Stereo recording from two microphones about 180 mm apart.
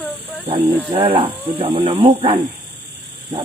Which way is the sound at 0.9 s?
30° right (ahead or behind).